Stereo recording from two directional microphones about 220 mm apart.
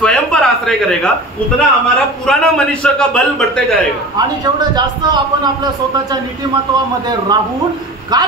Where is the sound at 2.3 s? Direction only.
5° left (ahead or behind).